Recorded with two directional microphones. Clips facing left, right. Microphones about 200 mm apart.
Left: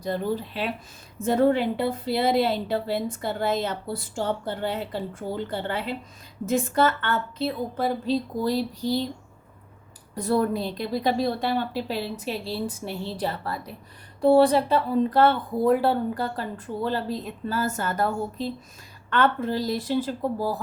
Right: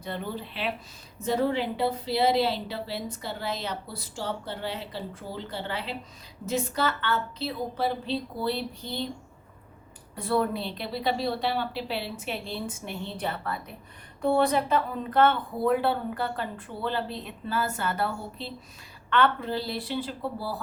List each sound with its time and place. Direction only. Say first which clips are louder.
0.0 s a woman's voice: left 7 dB; 40° left (ahead or behind)
10.2 s a woman's voice: left 3 dB; 40° left (ahead or behind)